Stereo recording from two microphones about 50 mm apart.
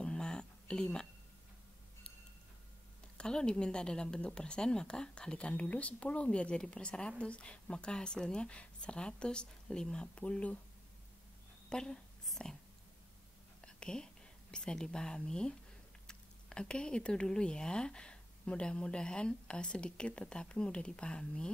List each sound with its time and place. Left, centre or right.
0.0 s a sound: centre
3.2 s a woman's voice: centre
11.7 s a woman's voice: centre
13.7 s whispering: centre
14.5 s a woman's voice: centre